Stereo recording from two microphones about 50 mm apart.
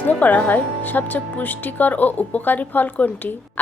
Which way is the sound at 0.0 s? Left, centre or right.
Left.